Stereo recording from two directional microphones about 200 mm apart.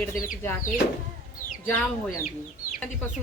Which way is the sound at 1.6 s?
10° left (ahead or behind).